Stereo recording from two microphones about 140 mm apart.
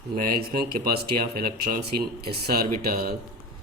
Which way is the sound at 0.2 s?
90° right.